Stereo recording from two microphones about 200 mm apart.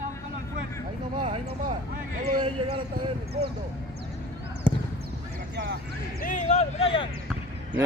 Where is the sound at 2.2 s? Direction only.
30° right (ahead or behind).